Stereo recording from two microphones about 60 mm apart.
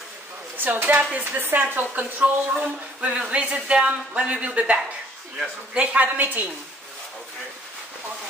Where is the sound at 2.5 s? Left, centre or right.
Centre.